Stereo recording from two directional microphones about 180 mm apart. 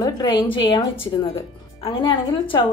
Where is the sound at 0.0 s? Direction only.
25° left (ahead or behind).